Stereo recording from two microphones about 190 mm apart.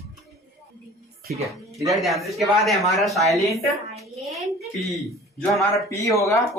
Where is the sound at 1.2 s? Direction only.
50° right (ahead or behind).